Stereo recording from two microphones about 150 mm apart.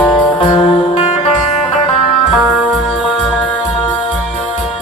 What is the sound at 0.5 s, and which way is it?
Music, 50° left (ahead or behind).